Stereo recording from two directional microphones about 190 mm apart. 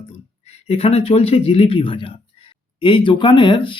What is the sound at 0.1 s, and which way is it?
Speech, 35° left (ahead or behind).